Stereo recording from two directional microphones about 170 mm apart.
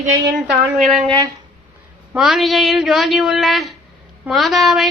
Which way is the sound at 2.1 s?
Centre (ahead or behind).